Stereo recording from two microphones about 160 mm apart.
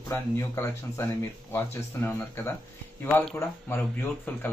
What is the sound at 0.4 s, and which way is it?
Speech, 15° left (ahead or behind).